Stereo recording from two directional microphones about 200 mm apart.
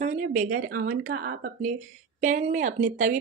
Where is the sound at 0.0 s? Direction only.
40° right (ahead or behind).